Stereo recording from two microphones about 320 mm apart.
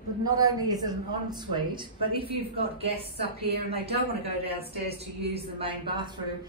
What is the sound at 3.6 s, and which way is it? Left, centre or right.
Speech, centre.